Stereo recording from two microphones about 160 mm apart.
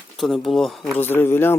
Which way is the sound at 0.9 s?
15° left (ahead or behind).